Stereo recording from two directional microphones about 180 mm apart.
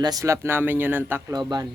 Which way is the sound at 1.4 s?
25° right (ahead or behind).